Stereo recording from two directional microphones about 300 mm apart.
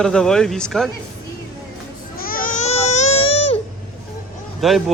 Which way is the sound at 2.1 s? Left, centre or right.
Left.